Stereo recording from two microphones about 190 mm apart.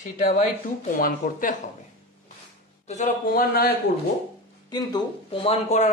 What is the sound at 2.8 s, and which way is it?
Speech, 40° left (ahead or behind).